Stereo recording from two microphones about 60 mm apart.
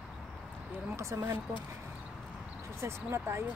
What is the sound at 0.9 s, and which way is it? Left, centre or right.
Speech, right.